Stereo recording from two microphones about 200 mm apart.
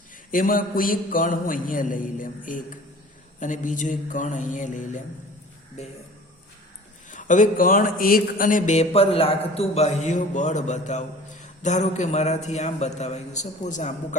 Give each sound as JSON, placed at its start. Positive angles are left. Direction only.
{"t": 0.3, "sound": "a man's voice", "side_deg": 45}
{"t": 7.1, "sound": "a man's voice", "side_deg": 40}